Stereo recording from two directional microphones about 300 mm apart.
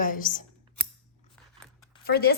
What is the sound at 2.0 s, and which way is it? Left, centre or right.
Speech, left.